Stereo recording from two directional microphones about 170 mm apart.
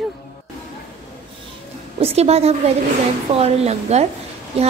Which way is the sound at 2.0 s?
35° right (ahead or behind).